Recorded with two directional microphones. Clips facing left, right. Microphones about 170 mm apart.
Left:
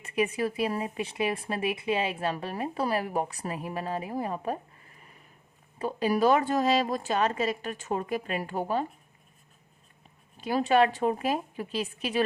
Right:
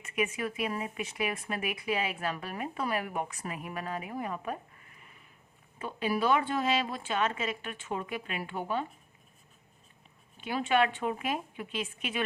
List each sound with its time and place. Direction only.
0.0 s speech: 30° left (ahead or behind)
5.8 s speech: 40° left (ahead or behind)
10.3 s speech: 40° left (ahead or behind)